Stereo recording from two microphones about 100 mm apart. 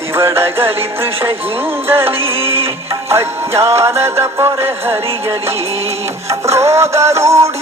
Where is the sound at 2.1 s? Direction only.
70° right (ahead or behind).